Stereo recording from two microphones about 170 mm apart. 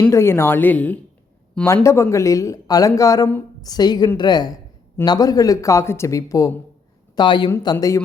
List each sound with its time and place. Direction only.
0.0 s a woman's voice: 15° left (ahead or behind)